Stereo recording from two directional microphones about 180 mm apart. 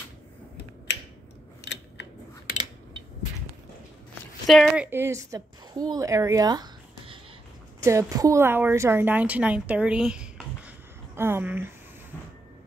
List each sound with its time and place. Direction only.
1.7 s a sound: 75° left (ahead or behind)
4.5 s speech: centre (ahead or behind)
4.8 s a woman's voice: 10° right (ahead or behind)